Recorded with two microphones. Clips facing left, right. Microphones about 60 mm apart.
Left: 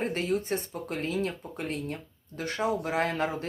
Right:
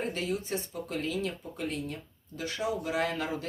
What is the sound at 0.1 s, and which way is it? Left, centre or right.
Speech, left.